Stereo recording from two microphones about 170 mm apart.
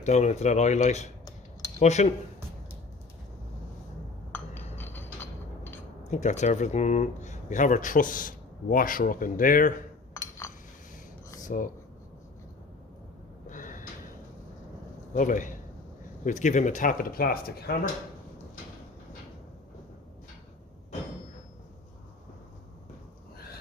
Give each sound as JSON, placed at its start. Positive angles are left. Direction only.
{"t": 0.0, "sound": "speech", "side_deg": 45}
{"t": 4.3, "sound": "a sound", "side_deg": 10}
{"t": 6.1, "sound": "speech", "side_deg": 45}
{"t": 11.4, "sound": "speech", "side_deg": 50}
{"t": 13.5, "sound": "gasp", "side_deg": 50}
{"t": 15.1, "sound": "speech", "side_deg": 50}